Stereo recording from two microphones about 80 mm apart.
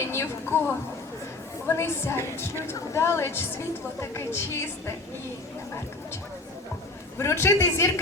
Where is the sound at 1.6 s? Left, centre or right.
Left.